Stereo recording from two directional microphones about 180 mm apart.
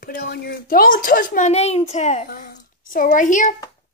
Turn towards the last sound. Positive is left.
turn(degrees=45)  # may be behind; listen again after turning